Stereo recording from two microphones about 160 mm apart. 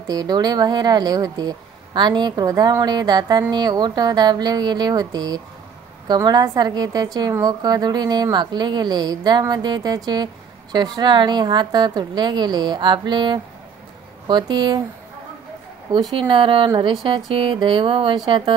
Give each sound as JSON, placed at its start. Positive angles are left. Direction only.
{"t": 0.0, "sound": "speech", "side_deg": -25}
{"t": 15.9, "sound": "speech", "side_deg": -30}